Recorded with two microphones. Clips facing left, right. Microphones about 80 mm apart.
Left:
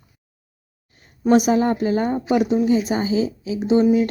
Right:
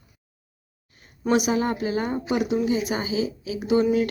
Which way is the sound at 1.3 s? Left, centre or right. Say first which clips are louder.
Left 6 dB; left.